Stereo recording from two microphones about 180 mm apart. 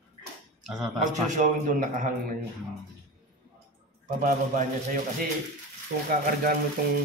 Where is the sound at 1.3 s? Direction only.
45° right (ahead or behind).